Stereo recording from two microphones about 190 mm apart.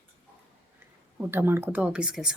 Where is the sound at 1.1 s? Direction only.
10° right (ahead or behind).